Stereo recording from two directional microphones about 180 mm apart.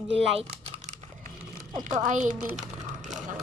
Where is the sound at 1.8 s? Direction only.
45° right (ahead or behind).